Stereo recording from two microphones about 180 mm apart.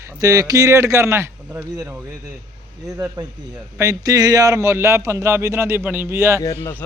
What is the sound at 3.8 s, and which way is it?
A man's voice, 20° right (ahead or behind).